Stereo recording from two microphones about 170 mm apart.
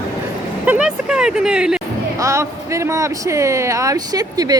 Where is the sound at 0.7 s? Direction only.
5° right (ahead or behind).